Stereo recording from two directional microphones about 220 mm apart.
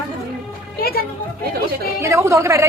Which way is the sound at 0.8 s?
45° left (ahead or behind).